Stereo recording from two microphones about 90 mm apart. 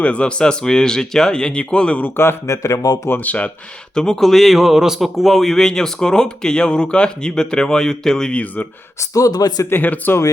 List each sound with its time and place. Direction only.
0.0 s a man's voice: 15° left (ahead or behind); by 3.0 s 45° left (ahead or behind)
3.2 s a man's voice: 15° left (ahead or behind)
3.9 s a man's voice: 5° left (ahead or behind)
9.0 s speech: 40° left (ahead or behind)
9.6 s speech: 20° left (ahead or behind)